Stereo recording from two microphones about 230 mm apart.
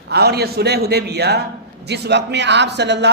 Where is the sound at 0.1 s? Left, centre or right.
Right.